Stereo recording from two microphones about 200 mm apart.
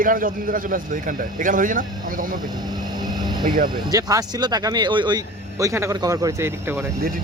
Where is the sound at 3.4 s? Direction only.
45° right (ahead or behind).